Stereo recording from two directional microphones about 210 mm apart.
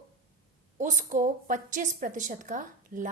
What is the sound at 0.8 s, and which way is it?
A woman's voice, 35° right (ahead or behind).